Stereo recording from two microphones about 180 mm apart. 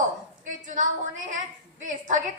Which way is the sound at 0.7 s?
45° right (ahead or behind).